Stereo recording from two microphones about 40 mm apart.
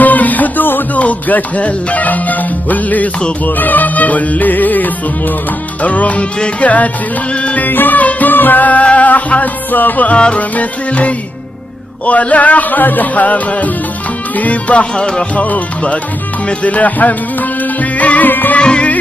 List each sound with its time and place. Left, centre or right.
0.0 s music: left
0.9 s music: left
7.6 s music: left
10.1 s music: left
10.5 s music: left
15.0 s music: left
15.3 s music: left
18.6 s music: left